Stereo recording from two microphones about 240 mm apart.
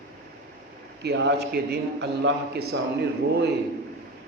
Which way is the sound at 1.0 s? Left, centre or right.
Right.